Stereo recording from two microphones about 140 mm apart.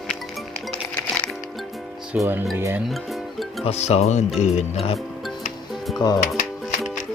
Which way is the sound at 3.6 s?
50° left (ahead or behind).